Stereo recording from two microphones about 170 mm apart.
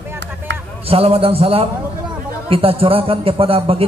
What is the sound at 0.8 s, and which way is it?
A man's voice, 35° right (ahead or behind).